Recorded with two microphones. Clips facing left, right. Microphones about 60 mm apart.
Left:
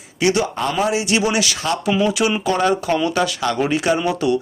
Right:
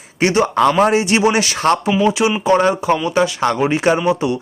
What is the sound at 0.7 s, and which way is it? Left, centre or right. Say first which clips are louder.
Speech: right 2 dB; right.